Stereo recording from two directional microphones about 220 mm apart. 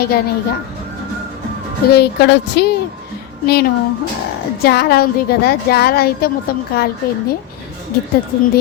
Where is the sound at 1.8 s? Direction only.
50° left (ahead or behind).